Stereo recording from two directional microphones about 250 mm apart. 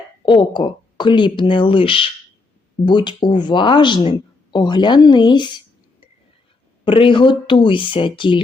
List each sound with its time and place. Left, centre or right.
0.3 s speech: centre
6.8 s speech: centre